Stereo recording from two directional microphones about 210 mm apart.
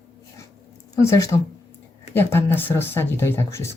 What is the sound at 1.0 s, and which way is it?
Speech, 15° left (ahead or behind).